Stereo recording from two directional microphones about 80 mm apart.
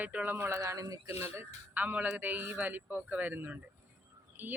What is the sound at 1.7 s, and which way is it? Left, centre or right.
Speech, right.